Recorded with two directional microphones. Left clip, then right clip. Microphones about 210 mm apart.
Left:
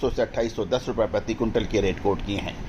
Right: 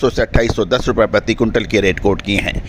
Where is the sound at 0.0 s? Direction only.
50° right (ahead or behind).